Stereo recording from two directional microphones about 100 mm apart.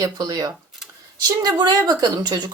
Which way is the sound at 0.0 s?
40° right (ahead or behind).